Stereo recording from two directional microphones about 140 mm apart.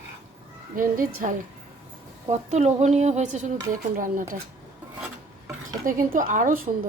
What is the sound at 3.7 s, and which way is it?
Speech, 75° right (ahead or behind).